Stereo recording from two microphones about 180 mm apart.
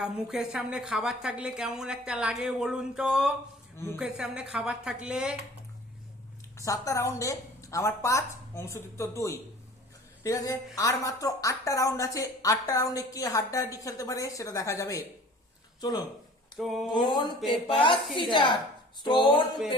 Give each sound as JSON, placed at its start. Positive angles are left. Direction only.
{"t": 0.0, "sound": "a woman's voice", "side_deg": -5}
{"t": 6.6, "sound": "a woman's voice", "side_deg": 20}
{"t": 16.6, "sound": "a woman's voice", "side_deg": 0}
{"t": 17.1, "sound": "a woman's voice", "side_deg": 25}